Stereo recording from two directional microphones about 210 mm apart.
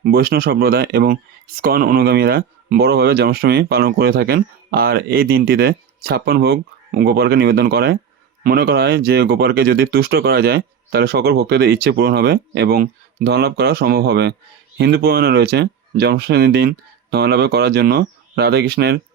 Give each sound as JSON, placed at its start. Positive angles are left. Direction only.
{"t": 0.0, "sound": "speech", "side_deg": -45}